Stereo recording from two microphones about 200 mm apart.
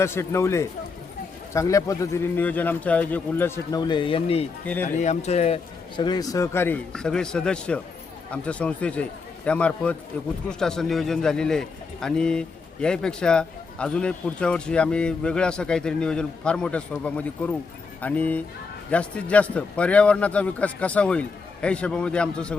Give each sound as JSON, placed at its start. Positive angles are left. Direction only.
{"t": 0.0, "sound": "a man's voice", "side_deg": 15}
{"t": 4.6, "sound": "a man's voice", "side_deg": 10}
{"t": 4.9, "sound": "speech", "side_deg": 35}
{"t": 6.0, "sound": "a man's voice", "side_deg": 20}